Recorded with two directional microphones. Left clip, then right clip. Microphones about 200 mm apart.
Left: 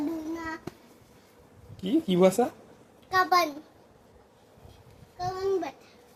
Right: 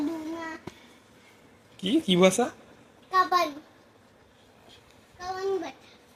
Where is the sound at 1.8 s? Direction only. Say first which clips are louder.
Right 1 dB; centre (ahead or behind).